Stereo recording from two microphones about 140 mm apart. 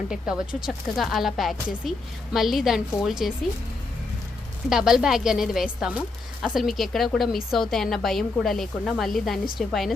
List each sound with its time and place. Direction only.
0.1 s a woman's voice: 5° right (ahead or behind)
4.7 s a woman's voice: 5° right (ahead or behind)